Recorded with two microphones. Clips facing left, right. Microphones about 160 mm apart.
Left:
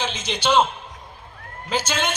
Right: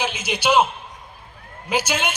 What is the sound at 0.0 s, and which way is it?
Speech, 10° right (ahead or behind).